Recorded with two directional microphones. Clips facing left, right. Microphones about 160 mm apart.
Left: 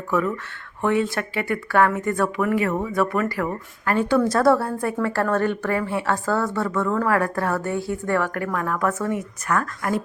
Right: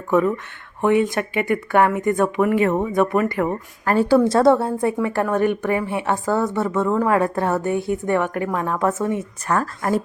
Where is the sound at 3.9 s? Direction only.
35° right (ahead or behind).